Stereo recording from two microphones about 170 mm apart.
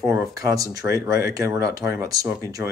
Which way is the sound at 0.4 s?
20° right (ahead or behind).